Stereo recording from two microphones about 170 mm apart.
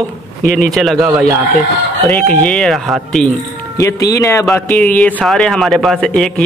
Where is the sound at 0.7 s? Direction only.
Centre (ahead or behind).